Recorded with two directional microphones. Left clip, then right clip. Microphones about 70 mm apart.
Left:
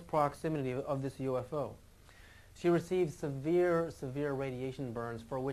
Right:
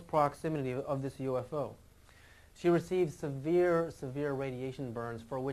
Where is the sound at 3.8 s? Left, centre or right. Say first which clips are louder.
Right 1 dB; centre.